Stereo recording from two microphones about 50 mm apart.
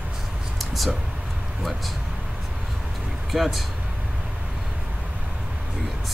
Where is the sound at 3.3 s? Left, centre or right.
Centre.